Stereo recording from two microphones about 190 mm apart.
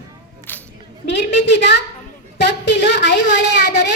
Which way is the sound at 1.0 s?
70° left (ahead or behind).